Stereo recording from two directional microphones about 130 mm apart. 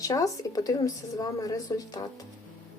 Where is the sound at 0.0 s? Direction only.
25° left (ahead or behind).